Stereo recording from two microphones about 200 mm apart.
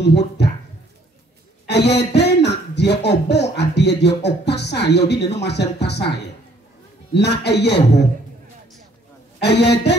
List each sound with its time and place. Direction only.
0.0 s speech: 55° left (ahead or behind)
1.7 s speech: 55° left (ahead or behind)
7.2 s speech: 55° left (ahead or behind)
9.4 s speech: 55° left (ahead or behind)